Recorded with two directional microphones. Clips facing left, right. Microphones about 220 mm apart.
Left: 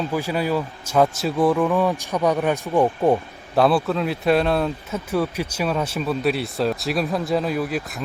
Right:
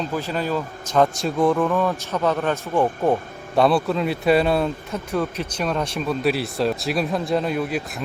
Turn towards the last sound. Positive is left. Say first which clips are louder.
# even
turn(degrees=0)  # may be behind; listen again after turning